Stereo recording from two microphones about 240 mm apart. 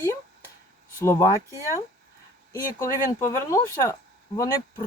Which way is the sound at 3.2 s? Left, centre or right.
Centre.